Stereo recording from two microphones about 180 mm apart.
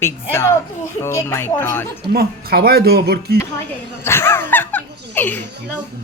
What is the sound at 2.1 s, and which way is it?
Speech, 60° right (ahead or behind).